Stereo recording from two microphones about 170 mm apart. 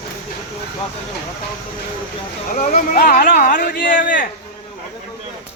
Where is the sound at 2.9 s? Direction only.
60° left (ahead or behind).